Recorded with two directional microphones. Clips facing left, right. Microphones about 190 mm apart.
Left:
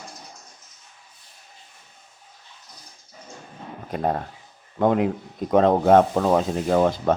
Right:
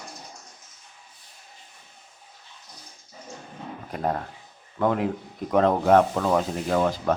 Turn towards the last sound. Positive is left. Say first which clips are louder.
# left 4 dB
turn(degrees=25)  # may be behind; listen again after turning